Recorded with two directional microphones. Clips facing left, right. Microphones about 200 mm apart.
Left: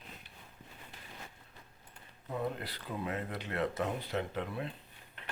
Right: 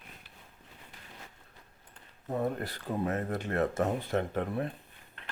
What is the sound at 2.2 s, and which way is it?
Speech, 45° right (ahead or behind).